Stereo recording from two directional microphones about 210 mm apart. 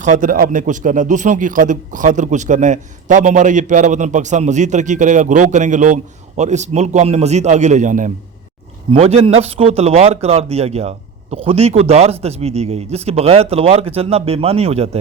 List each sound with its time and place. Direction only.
0.0 s a man's voice: 40° right (ahead or behind)